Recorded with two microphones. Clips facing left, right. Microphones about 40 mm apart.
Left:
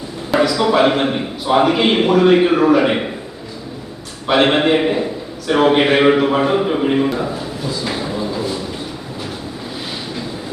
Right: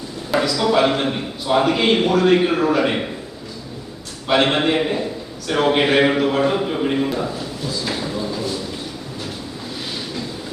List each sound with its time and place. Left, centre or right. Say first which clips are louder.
0.3 s a man's voice: left 3 dB; centre
4.4 s a man's voice: left 4 dB; centre
7.9 s a sound: left 2 dB; centre